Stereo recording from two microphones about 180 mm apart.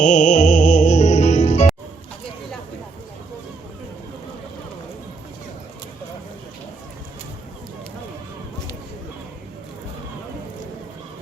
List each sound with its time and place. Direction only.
0.0 s music: 45° left (ahead or behind)